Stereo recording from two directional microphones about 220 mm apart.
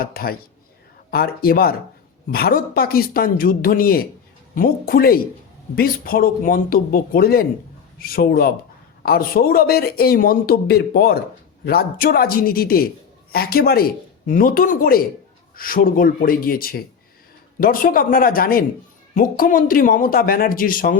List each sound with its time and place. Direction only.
0.0 s speech: 45° left (ahead or behind)